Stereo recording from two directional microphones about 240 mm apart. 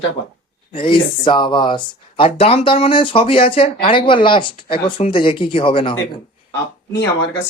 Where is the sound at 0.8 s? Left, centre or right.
Left.